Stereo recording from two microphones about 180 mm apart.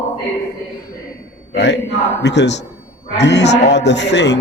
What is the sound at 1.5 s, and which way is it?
A man's voice, 70° left (ahead or behind).